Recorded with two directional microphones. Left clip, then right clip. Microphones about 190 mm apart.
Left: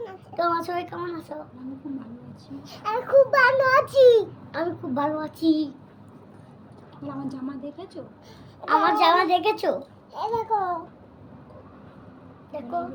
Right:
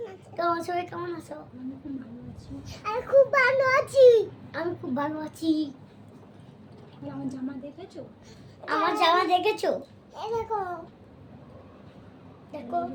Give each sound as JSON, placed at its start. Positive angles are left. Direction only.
{"t": 0.3, "sound": "a child's voice", "side_deg": -20}
{"t": 2.6, "sound": "a child's voice", "side_deg": 0}
{"t": 4.5, "sound": "a child's voice", "side_deg": -20}
{"t": 7.3, "sound": "a child's voice", "side_deg": 0}
{"t": 8.6, "sound": "a child's voice", "side_deg": -20}
{"t": 10.2, "sound": "a child's voice", "side_deg": 0}